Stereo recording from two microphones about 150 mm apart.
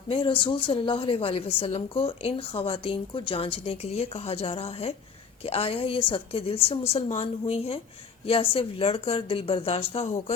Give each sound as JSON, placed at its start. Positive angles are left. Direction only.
{"t": 0.1, "sound": "a woman's voice", "side_deg": 35}